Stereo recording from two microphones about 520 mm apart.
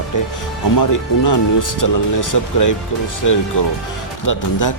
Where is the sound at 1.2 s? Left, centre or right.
Left.